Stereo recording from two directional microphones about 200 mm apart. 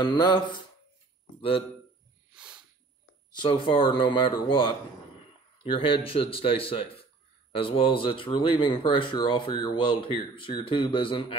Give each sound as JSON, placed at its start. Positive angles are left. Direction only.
{"t": 0.1, "sound": "speech", "side_deg": 20}
{"t": 2.3, "sound": "a sound", "side_deg": -5}
{"t": 3.3, "sound": "speech", "side_deg": 25}